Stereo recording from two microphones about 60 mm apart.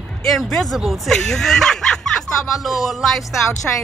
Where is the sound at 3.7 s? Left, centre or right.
Left.